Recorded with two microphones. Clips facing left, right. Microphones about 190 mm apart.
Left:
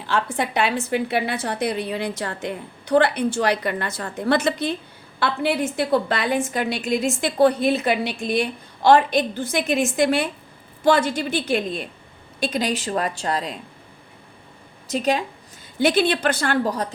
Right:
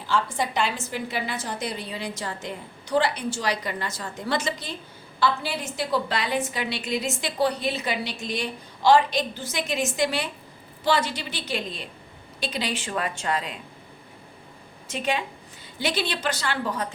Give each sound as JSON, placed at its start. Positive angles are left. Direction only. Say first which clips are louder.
{"t": 0.1, "sound": "a woman's voice", "louder": "left 2 dB", "side_deg": 65}
{"t": 14.8, "sound": "a woman's voice", "louder": "left 6 dB", "side_deg": 40}
{"t": 15.8, "sound": "a woman's voice", "louder": "left 8 dB", "side_deg": 50}
{"t": 16.6, "sound": "a woman's voice", "louder": "left 5 dB", "side_deg": 35}